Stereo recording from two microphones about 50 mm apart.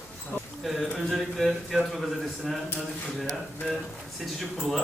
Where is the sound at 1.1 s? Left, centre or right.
Centre.